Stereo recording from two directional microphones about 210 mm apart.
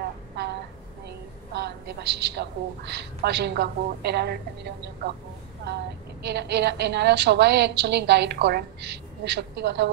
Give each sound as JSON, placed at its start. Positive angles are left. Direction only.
{"t": 1.5, "sound": "a woman's voice", "side_deg": -55}
{"t": 6.2, "sound": "a woman's voice", "side_deg": -55}